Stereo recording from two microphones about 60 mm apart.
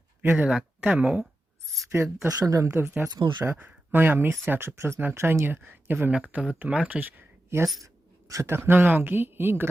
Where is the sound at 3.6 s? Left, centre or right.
Right.